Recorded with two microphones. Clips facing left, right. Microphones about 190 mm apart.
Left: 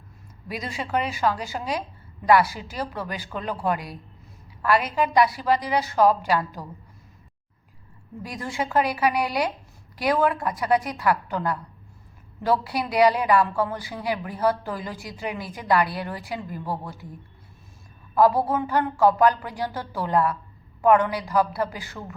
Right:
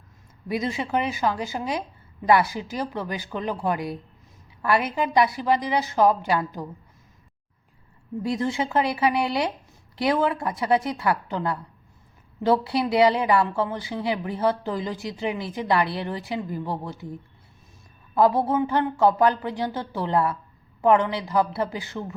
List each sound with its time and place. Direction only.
0.4 s a woman's voice: 20° right (ahead or behind)
8.2 s a woman's voice: 25° right (ahead or behind)
18.1 s a woman's voice: 25° right (ahead or behind)